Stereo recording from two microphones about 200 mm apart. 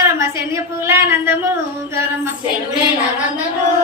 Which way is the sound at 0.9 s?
10° right (ahead or behind).